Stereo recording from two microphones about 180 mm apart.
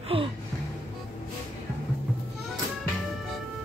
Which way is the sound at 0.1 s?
30° right (ahead or behind).